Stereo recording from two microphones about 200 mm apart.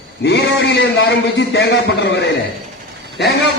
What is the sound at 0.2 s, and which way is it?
Speech, 60° left (ahead or behind).